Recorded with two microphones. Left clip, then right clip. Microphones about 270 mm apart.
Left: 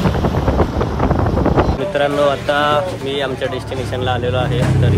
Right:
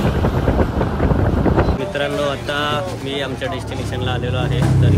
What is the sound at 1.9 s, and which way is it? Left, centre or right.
Speech, centre.